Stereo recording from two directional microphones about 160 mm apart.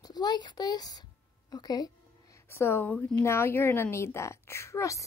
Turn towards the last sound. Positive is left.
turn(degrees=20)  # may be behind; listen again after turning